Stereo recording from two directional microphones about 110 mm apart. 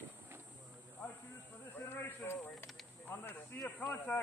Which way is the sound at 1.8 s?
20° left (ahead or behind).